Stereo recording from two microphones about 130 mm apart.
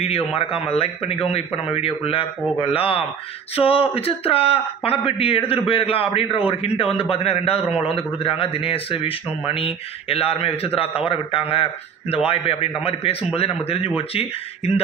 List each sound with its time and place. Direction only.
0.0 s a man's voice: 50° left (ahead or behind)